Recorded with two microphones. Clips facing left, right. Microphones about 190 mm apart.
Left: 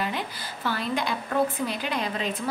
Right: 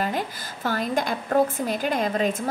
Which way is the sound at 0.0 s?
45° right (ahead or behind).